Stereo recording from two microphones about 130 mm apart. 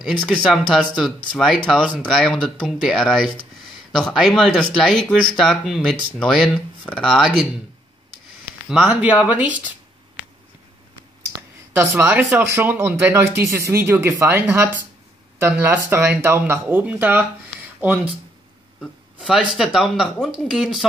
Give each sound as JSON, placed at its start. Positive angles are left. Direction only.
{"t": 0.0, "sound": "speech", "side_deg": 5}
{"t": 8.6, "sound": "speech", "side_deg": -10}
{"t": 11.7, "sound": "speech", "side_deg": -20}
{"t": 19.1, "sound": "speech", "side_deg": -5}